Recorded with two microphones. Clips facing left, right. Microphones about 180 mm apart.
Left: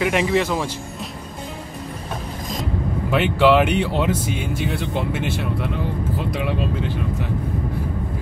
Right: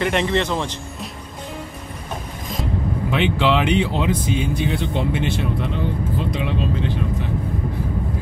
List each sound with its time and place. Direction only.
0.0 s speech: 5° left (ahead or behind)
3.1 s speech: 5° left (ahead or behind)